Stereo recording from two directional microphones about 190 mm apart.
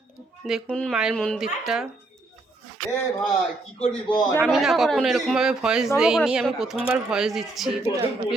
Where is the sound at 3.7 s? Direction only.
30° left (ahead or behind).